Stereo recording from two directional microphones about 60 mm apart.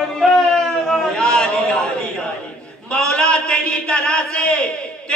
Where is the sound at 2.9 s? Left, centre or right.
Centre.